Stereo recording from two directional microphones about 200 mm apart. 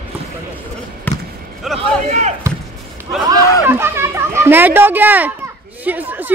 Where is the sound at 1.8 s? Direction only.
35° right (ahead or behind).